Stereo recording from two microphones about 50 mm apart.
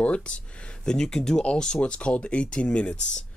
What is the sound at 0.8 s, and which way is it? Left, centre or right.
Speech, centre.